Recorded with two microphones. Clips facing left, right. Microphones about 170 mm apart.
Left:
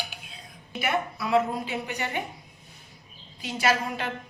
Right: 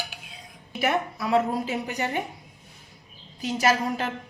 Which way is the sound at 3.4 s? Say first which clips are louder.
Right 3 dB; 40° right (ahead or behind).